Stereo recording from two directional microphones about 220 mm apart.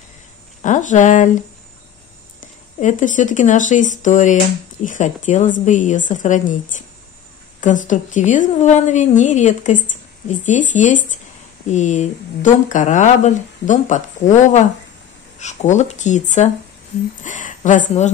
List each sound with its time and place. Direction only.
0.6 s speech: 35° left (ahead or behind)
2.4 s speech: 35° left (ahead or behind)